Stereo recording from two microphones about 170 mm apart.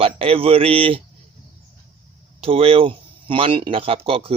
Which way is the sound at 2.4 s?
35° right (ahead or behind).